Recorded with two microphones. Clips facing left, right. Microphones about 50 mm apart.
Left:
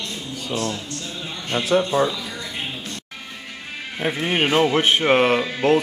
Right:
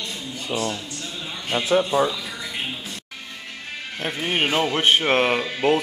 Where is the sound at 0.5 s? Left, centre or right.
Centre.